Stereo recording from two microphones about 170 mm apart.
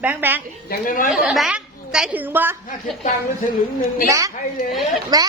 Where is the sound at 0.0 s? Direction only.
10° right (ahead or behind).